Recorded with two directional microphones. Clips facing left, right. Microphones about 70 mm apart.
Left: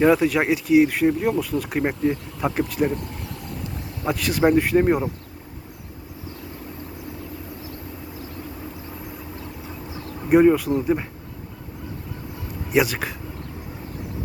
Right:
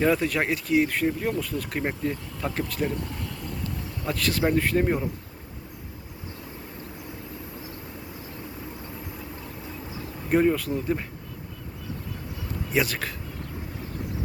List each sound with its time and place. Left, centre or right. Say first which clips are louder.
0.0 s speech: left 6 dB; centre
4.0 s speech: left 6 dB; centre
10.2 s speech: left 7 dB; centre
12.7 s speech: left 5 dB; centre